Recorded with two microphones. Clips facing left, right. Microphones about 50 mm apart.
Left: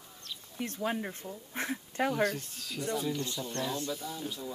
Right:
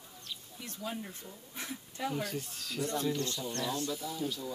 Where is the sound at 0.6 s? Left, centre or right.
Left.